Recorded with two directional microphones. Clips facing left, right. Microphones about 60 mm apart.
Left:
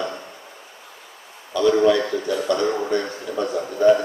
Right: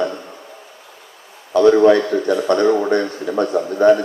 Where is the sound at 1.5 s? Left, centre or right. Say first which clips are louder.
Right 6 dB; right.